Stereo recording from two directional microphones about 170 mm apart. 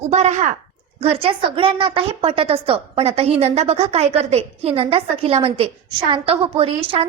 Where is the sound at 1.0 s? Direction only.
35° right (ahead or behind).